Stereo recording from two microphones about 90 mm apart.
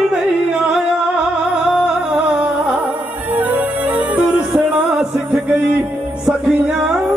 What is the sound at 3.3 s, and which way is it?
Music, 20° right (ahead or behind).